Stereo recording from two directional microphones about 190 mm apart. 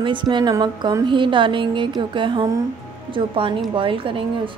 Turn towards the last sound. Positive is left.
turn(degrees=-25)  # may be behind; listen again after turning